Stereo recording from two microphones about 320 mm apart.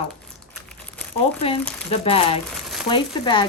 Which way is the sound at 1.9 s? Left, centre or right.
Centre.